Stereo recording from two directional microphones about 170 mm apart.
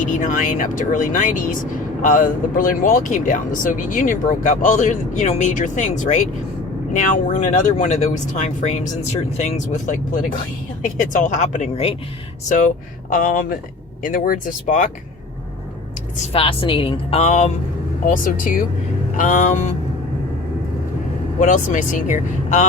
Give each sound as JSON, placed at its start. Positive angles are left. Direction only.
{"t": 0.0, "sound": "speech", "side_deg": 50}
{"t": 12.5, "sound": "speech", "side_deg": 50}
{"t": 16.1, "sound": "a woman's voice", "side_deg": 40}
{"t": 18.0, "sound": "speech", "side_deg": 55}
{"t": 21.3, "sound": "speech", "side_deg": 50}